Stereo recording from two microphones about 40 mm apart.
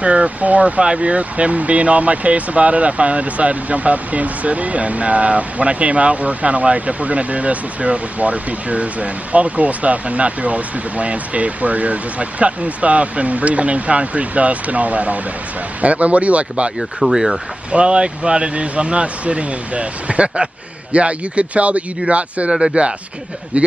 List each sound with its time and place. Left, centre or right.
0.0 s speech: right
17.0 s speech: centre
17.6 s speech: right